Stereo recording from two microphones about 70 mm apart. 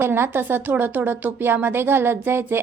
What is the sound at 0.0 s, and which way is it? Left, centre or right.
Speech, right.